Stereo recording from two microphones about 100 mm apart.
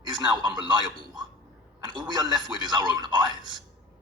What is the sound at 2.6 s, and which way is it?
Speech, 45° right (ahead or behind).